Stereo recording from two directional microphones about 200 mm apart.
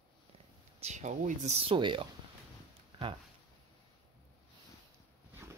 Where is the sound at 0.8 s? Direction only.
35° right (ahead or behind).